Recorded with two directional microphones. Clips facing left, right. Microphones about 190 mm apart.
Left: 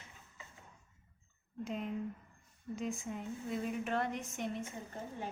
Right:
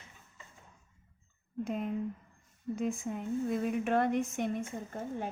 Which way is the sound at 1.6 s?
50° right (ahead or behind).